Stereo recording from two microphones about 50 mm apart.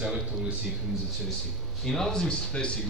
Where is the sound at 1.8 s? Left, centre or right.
Centre.